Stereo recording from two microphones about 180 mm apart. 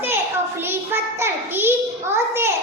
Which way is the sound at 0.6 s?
10° right (ahead or behind).